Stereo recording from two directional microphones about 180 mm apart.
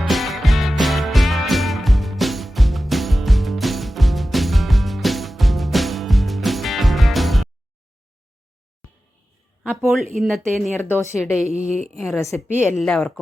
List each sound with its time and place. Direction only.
0.1 s music: centre (ahead or behind)
9.6 s speech: centre (ahead or behind)
10.8 s speech: 10° left (ahead or behind)
11.7 s speech: centre (ahead or behind)